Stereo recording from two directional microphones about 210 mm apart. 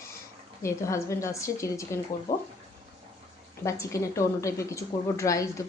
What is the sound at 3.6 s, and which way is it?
A woman's voice, 15° left (ahead or behind).